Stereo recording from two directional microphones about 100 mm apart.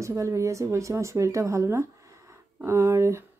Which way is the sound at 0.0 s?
30° right (ahead or behind).